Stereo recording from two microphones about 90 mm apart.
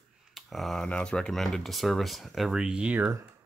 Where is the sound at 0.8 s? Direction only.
10° left (ahead or behind).